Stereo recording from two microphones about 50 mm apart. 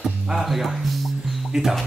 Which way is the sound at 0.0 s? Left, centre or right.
Centre.